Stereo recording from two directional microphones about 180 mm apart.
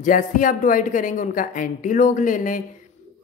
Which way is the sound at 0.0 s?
45° left (ahead or behind).